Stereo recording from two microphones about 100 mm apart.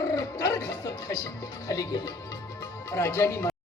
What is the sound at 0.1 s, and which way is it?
Speech, 35° left (ahead or behind).